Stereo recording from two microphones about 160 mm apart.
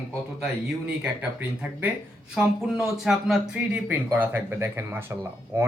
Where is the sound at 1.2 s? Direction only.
10° right (ahead or behind).